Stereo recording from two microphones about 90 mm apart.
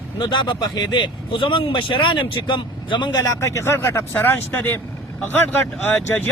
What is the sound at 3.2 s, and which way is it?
Speech, 35° left (ahead or behind).